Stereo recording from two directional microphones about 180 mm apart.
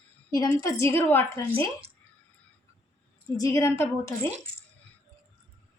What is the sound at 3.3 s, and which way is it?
Speech, 15° left (ahead or behind).